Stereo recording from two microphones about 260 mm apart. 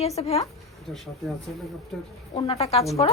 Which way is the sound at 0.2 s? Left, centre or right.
Left.